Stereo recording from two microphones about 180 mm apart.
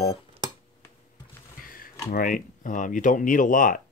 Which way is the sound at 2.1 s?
50° left (ahead or behind).